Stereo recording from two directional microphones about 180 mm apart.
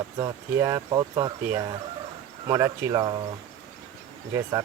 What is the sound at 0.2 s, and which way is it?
Speech, 25° right (ahead or behind).